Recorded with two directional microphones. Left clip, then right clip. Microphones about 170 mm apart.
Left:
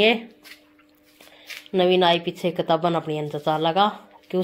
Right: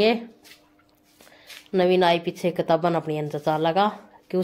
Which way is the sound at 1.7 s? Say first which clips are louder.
Left 1 dB; centre (ahead or behind).